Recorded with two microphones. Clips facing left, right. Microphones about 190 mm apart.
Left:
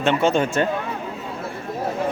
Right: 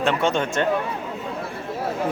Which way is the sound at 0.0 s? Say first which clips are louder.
Left 3 dB; centre (ahead or behind).